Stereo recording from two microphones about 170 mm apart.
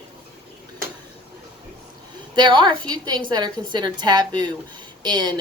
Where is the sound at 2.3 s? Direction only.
25° right (ahead or behind).